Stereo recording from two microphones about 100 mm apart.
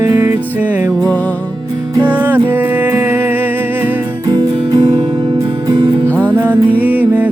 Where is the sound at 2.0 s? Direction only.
20° right (ahead or behind).